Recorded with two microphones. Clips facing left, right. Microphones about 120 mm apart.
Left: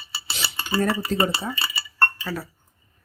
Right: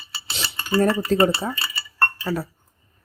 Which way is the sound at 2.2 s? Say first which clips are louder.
Right 5 dB; 25° right (ahead or behind).